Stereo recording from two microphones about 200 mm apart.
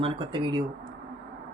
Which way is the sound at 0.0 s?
25° right (ahead or behind).